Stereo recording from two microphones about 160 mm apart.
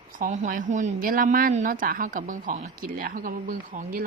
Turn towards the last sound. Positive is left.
turn(degrees=-55)  # may be behind; listen again after turning